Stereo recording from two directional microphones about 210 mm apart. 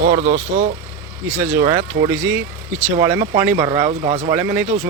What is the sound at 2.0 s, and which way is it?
Speech, 50° right (ahead or behind).